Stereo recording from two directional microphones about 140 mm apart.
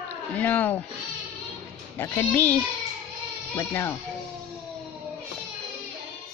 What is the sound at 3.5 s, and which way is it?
Speech, 20° left (ahead or behind).